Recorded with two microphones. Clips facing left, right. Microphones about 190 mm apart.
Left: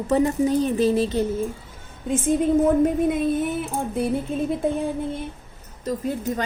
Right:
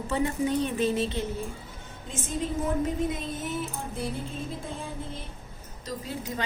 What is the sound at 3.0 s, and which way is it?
Speech, 55° left (ahead or behind).